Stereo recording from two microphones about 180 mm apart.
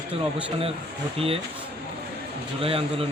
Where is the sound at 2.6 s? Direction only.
30° right (ahead or behind).